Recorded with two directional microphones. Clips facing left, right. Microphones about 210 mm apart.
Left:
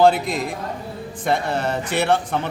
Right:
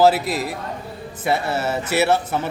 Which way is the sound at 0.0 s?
5° right (ahead or behind).